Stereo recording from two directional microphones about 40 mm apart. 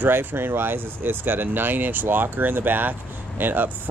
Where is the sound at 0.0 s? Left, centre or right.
Right.